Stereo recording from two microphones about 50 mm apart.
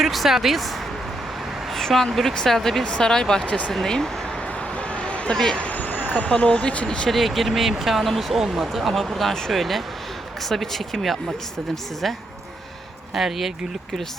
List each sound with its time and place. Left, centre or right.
0.0 s speech: centre
1.7 s a woman's voice: centre
2.8 s speech: centre
3.4 s speech: left
3.7 s speech: centre
4.8 s a sound: left
5.5 s speech: left
7.1 s speech: centre